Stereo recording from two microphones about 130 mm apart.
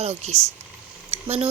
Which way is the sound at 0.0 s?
55° right (ahead or behind).